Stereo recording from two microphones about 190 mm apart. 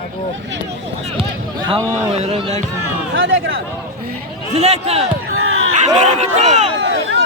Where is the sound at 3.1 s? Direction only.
90° right.